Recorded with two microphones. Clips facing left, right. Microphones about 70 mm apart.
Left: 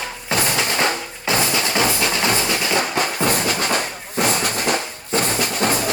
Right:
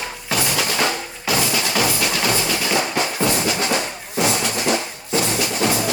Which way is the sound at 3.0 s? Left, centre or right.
Left.